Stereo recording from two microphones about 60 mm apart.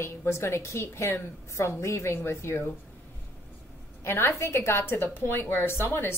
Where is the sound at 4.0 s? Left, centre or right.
Left.